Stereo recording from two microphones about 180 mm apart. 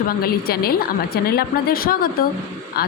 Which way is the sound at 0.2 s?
55° left (ahead or behind).